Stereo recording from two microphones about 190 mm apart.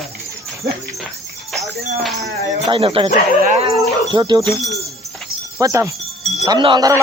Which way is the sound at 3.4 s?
35° right (ahead or behind).